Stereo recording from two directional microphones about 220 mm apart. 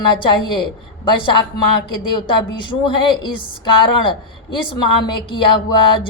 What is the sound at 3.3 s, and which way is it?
A woman's voice, 20° left (ahead or behind).